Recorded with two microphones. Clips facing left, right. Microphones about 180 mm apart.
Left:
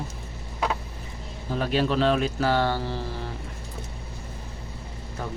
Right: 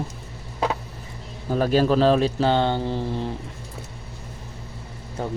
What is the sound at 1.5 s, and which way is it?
Speech, 45° right (ahead or behind).